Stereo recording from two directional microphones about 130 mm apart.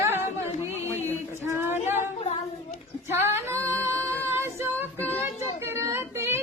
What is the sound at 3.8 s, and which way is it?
Female singing, 20° right (ahead or behind).